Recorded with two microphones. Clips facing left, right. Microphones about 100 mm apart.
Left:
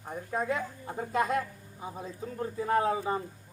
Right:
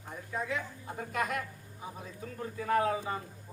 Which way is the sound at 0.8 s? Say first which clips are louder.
Left 5 dB; 25° left (ahead or behind).